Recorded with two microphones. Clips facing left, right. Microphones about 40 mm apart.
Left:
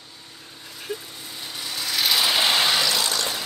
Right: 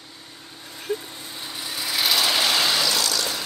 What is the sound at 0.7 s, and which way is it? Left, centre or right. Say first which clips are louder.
Vehicle: right 4 dB; right.